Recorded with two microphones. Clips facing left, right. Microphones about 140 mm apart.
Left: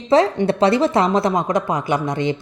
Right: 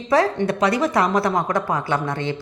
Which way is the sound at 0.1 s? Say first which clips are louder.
Left 3 dB; 25° left (ahead or behind).